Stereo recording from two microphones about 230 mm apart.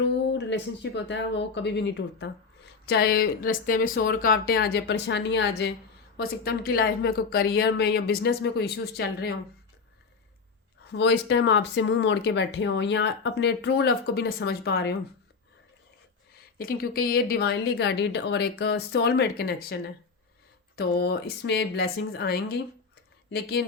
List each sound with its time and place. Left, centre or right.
0.0 s speech: left
10.9 s speech: left
16.6 s speech: left